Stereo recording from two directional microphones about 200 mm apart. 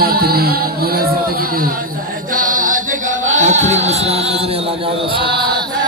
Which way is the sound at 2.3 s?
40° right (ahead or behind).